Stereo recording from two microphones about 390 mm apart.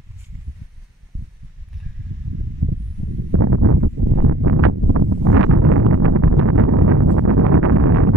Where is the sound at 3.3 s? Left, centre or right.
Right.